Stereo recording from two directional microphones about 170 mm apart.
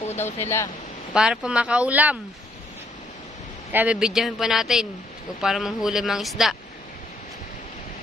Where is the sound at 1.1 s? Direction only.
5° right (ahead or behind).